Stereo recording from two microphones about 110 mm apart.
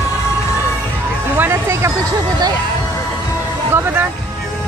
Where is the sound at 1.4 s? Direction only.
25° right (ahead or behind).